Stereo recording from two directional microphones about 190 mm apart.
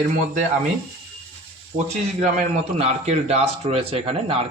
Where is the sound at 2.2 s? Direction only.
35° right (ahead or behind).